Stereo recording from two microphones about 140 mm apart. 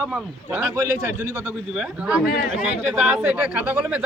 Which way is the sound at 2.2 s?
90° left.